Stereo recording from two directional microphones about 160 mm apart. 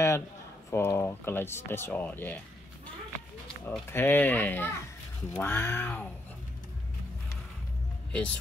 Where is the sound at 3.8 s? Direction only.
15° left (ahead or behind).